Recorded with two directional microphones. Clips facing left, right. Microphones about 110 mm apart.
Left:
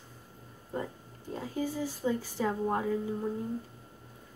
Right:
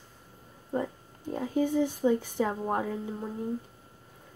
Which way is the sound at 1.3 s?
20° right (ahead or behind).